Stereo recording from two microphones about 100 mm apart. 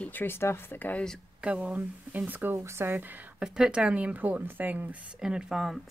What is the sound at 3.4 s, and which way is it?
Speech, 5° right (ahead or behind).